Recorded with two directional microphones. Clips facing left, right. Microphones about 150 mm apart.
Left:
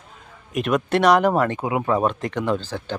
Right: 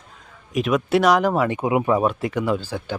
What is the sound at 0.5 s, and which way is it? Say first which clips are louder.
Speech: right 1 dB; centre (ahead or behind).